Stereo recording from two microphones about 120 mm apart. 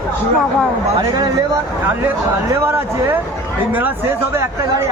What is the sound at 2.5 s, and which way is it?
Speech, 20° right (ahead or behind).